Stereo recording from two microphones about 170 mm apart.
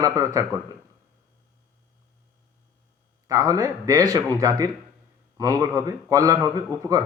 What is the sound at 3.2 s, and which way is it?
Speech, 20° right (ahead or behind).